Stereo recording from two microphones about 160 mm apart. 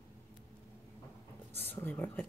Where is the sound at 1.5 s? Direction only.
10° left (ahead or behind).